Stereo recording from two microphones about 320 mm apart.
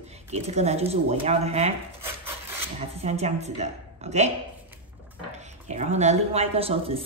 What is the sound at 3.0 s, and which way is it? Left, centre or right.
A woman's voice, centre.